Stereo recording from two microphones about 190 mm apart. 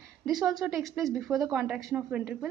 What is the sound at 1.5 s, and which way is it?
A woman's voice, 5° right (ahead or behind).